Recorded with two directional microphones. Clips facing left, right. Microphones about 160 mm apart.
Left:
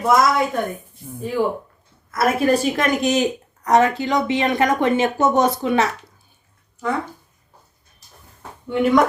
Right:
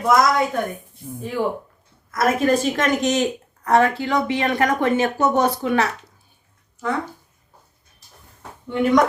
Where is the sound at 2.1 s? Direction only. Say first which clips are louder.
Left 1 dB; 10° left (ahead or behind).